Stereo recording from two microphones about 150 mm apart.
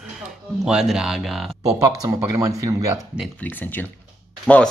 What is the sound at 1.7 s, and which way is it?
Speech, 20° right (ahead or behind).